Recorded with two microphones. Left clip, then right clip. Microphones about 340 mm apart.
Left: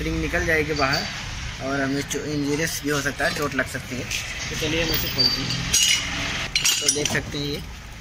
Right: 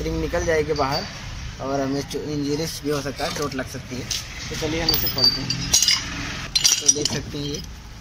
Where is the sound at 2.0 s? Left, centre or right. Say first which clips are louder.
Even; centre.